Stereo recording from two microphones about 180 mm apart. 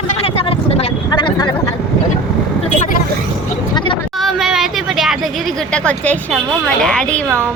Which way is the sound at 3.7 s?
30° left (ahead or behind).